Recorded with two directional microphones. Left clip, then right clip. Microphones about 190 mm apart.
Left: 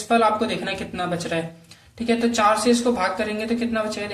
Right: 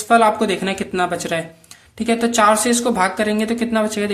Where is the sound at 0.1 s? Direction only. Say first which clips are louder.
Right 5 dB; 40° right (ahead or behind).